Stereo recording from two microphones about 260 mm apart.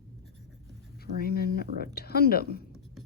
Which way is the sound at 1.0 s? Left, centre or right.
Left.